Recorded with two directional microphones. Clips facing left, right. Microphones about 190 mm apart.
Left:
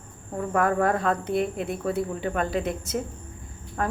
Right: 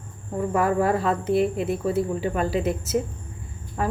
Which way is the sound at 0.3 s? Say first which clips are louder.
Right 2 dB; 5° right (ahead or behind).